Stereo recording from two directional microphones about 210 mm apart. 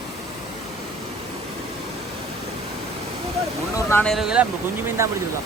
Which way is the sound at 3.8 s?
10° left (ahead or behind).